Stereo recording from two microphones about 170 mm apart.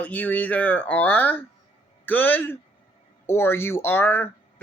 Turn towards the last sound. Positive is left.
turn(degrees=15)  # may be behind; listen again after turning